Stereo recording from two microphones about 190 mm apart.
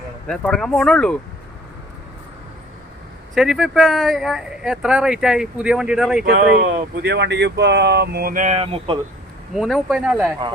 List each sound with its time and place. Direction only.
0.3 s speech: 5° left (ahead or behind)
3.3 s speech: centre (ahead or behind)
6.2 s speech: 45° right (ahead or behind)
7.1 s speech: 65° right (ahead or behind); by 9.0 s 30° right (ahead or behind)
9.5 s speech: centre (ahead or behind)